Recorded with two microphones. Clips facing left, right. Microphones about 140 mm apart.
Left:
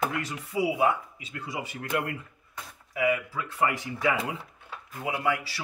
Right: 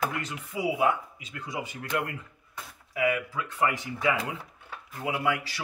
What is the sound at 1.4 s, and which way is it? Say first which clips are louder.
Speech: even; 5° left (ahead or behind).